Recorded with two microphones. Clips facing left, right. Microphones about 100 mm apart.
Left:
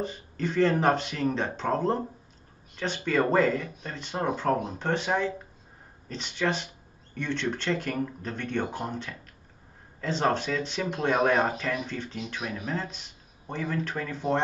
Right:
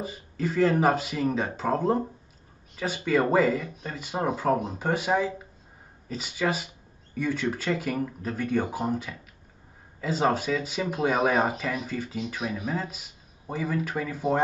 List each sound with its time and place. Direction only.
0.0 s speech: 5° right (ahead or behind)